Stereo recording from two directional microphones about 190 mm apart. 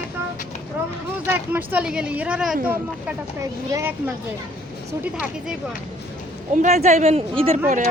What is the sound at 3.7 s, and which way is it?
Speech, 15° right (ahead or behind).